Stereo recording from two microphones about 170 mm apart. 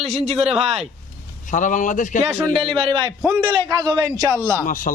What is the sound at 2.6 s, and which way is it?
A man's voice, 30° right (ahead or behind).